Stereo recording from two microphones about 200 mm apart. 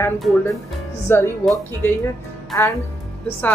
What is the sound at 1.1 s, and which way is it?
Speech, 10° left (ahead or behind).